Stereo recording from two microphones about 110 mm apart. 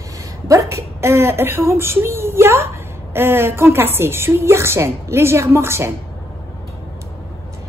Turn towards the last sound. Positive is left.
turn(degrees=-25)  # may be behind; listen again after turning